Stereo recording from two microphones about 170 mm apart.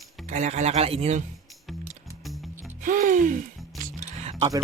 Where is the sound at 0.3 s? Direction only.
45° right (ahead or behind).